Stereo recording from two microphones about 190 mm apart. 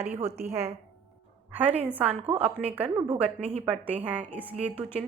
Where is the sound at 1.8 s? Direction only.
10° right (ahead or behind).